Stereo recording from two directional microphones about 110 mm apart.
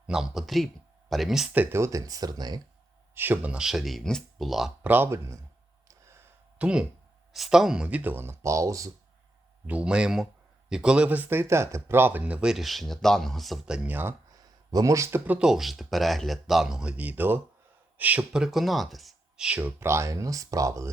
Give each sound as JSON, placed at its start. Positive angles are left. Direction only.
{"t": 0.1, "sound": "speech", "side_deg": -5}
{"t": 1.5, "sound": "speech", "side_deg": -25}
{"t": 3.2, "sound": "speech", "side_deg": -20}
{"t": 4.8, "sound": "speech", "side_deg": -15}
{"t": 5.9, "sound": "a sound", "side_deg": -25}
{"t": 6.6, "sound": "speech", "side_deg": -10}
{"t": 9.6, "sound": "speech", "side_deg": -10}
{"t": 14.3, "sound": "speech", "side_deg": -35}
{"t": 15.4, "sound": "speech", "side_deg": -5}
{"t": 19.8, "sound": "speech", "side_deg": -25}